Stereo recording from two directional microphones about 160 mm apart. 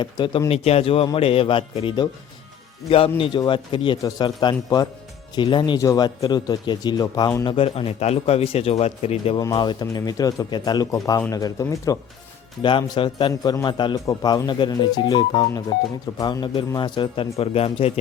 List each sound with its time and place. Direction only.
0.0 s speech: 30° left (ahead or behind)
3.2 s a man's voice: 30° left (ahead or behind)
7.5 s speech: 35° left (ahead or behind)
9.4 s a man's voice: 25° left (ahead or behind)